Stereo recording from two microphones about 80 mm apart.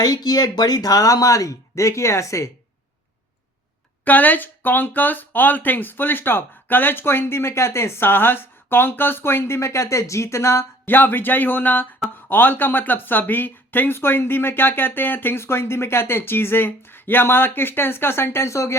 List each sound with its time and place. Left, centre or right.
0.0 s speech: left
4.0 s speech: left